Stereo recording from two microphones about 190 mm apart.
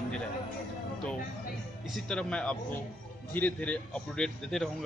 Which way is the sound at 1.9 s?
5° left (ahead or behind).